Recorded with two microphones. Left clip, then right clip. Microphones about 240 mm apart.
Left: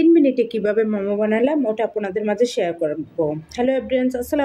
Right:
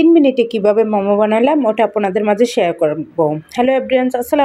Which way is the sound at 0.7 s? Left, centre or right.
Right.